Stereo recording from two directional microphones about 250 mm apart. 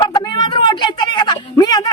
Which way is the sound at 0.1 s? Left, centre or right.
Centre.